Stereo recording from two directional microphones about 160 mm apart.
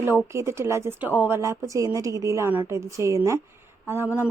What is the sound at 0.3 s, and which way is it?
A woman's voice, 15° right (ahead or behind).